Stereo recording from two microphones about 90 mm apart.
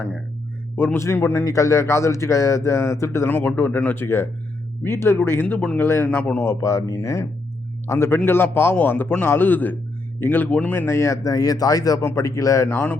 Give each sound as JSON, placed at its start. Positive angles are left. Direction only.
{"t": 0.9, "sound": "a man's voice", "side_deg": 30}
{"t": 10.8, "sound": "a man's voice", "side_deg": 30}